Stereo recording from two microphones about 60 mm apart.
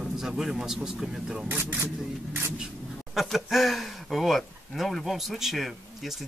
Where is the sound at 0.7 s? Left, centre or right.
Centre.